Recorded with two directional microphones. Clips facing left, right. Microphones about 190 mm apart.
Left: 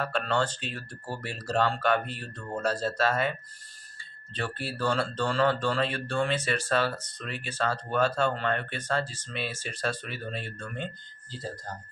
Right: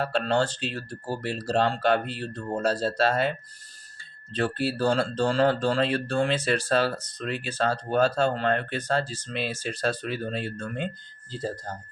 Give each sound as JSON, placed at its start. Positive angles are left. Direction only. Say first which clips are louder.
{"t": 0.0, "sound": "speech", "louder": "right 4 dB", "side_deg": -35}
{"t": 4.4, "sound": "speech", "louder": "right 7 dB", "side_deg": -40}